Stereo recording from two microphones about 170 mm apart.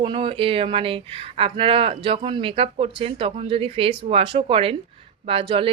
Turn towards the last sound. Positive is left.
turn(degrees=-30)  # may be behind; listen again after turning